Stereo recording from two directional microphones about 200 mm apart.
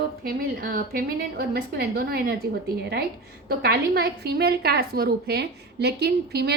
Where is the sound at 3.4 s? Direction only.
50° right (ahead or behind).